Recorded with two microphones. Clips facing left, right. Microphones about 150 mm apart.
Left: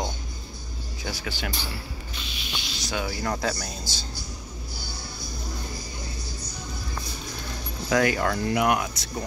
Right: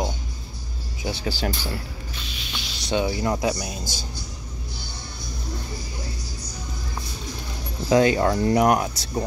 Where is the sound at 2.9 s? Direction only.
20° right (ahead or behind).